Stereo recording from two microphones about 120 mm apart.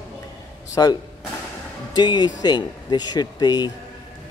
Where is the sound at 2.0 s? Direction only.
35° left (ahead or behind).